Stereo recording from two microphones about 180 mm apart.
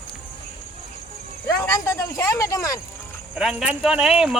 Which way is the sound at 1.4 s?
15° left (ahead or behind).